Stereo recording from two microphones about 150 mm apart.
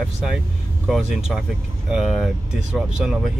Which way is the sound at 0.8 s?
Centre (ahead or behind).